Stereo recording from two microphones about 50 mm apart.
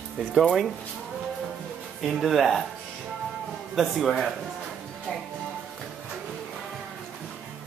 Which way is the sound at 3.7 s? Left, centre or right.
Centre.